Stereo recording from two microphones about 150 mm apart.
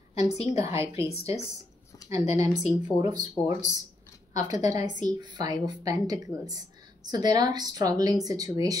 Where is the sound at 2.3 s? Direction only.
25° right (ahead or behind).